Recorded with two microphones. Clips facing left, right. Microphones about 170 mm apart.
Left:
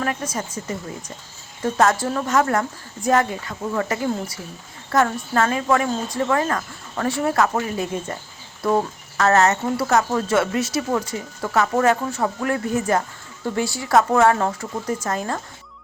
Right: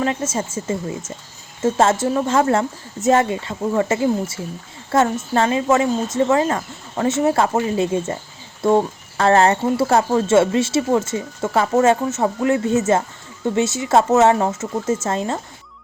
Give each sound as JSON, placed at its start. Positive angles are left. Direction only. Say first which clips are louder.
{"t": 0.0, "sound": "a woman's voice", "louder": "right 4 dB", "side_deg": -25}